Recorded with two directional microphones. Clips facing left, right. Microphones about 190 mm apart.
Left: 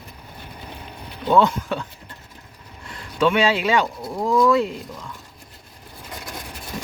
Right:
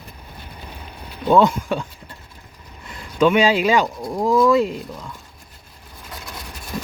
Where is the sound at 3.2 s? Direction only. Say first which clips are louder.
Right 3 dB; 15° right (ahead or behind).